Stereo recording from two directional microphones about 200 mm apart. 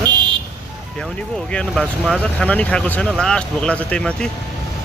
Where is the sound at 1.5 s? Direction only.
Centre (ahead or behind).